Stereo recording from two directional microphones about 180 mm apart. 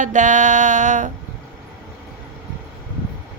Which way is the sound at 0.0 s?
45° right (ahead or behind).